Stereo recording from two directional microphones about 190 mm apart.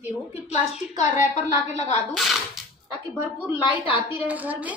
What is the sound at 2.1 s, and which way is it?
Speech, centre (ahead or behind).